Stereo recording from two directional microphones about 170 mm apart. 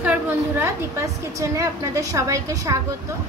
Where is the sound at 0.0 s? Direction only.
10° right (ahead or behind).